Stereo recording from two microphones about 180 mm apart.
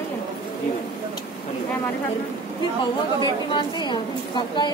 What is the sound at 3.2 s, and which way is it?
A woman's voice, 25° left (ahead or behind).